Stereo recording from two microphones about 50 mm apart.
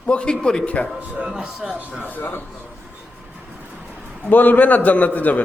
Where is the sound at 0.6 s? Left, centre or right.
Left.